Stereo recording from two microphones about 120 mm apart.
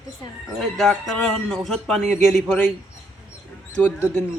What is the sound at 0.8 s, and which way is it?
Speech, centre (ahead or behind).